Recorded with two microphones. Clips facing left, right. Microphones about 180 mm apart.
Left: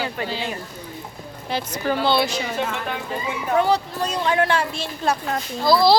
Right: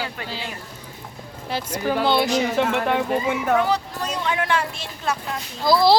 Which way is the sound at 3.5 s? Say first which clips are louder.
Left 2 dB; 30° left (ahead or behind).